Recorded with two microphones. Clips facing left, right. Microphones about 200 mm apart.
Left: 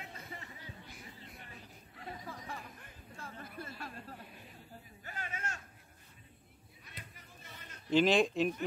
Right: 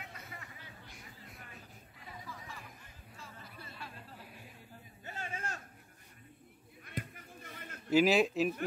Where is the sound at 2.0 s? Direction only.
60° left (ahead or behind).